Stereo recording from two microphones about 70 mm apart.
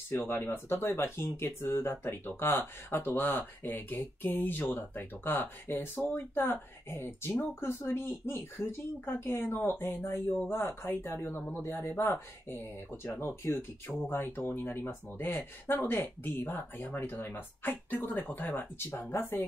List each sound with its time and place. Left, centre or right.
0.1 s speech: left